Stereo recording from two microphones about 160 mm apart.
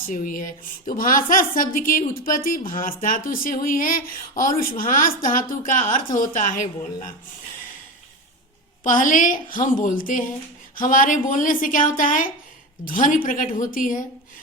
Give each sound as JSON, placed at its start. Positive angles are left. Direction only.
{"t": 0.1, "sound": "a woman's voice", "side_deg": 55}
{"t": 8.8, "sound": "a woman's voice", "side_deg": 55}